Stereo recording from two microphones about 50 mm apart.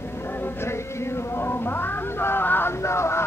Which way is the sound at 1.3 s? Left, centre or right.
Left.